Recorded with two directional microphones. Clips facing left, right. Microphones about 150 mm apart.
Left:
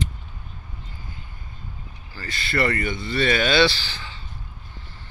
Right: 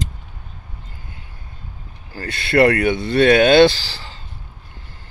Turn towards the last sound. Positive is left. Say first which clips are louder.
# right 1 dB
turn(degrees=-40)  # may be behind; listen again after turning